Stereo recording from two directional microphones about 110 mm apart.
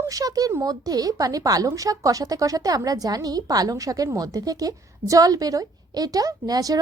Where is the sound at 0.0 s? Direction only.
35° right (ahead or behind).